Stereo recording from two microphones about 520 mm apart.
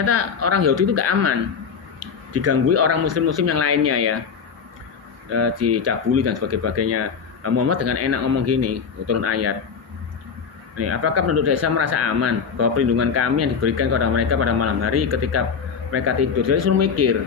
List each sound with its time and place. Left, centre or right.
0.0 s speech: right
2.3 s speech: right
5.3 s speech: right
10.8 s speech: right